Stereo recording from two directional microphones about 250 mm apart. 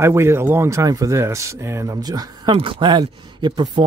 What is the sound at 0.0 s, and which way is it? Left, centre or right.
Speech, centre.